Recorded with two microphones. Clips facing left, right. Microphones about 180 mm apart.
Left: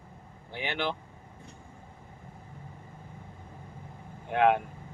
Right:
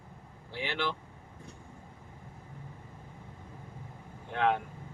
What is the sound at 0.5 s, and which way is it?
Speech, 60° left (ahead or behind).